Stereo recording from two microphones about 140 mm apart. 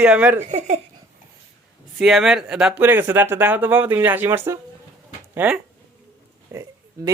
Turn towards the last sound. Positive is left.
turn(degrees=-20)  # may be behind; listen again after turning